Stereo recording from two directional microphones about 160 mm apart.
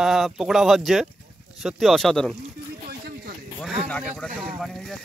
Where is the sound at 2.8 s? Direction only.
70° right (ahead or behind).